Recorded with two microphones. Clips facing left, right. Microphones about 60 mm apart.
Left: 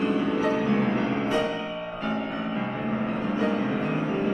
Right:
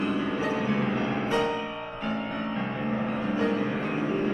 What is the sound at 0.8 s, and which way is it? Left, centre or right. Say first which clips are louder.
Music: left 2 dB; left.